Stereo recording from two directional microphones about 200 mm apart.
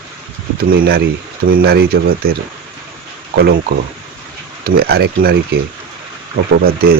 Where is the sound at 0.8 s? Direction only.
50° right (ahead or behind).